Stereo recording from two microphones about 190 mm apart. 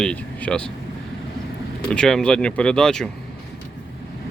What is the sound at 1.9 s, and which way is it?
Speech, 5° left (ahead or behind).